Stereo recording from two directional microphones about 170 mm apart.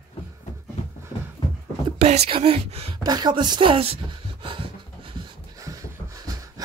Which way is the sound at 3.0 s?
25° right (ahead or behind).